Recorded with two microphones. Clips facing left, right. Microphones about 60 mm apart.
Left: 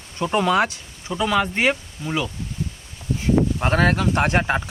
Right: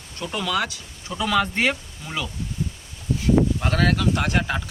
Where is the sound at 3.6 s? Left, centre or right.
Left.